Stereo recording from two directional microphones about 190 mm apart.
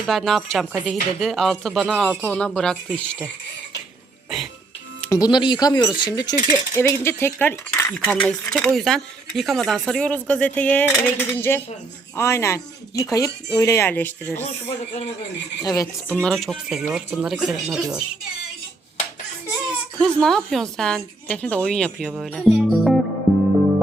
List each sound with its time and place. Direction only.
0.0 s a woman's voice: centre (ahead or behind)
4.9 s speech: 15° left (ahead or behind)
6.5 s cutlery: 15° left (ahead or behind)
15.6 s speech: 20° left (ahead or behind)
16.2 s a woman's voice: 5° left (ahead or behind)
20.0 s a woman's voice: 5° left (ahead or behind)
23.3 s music: centre (ahead or behind)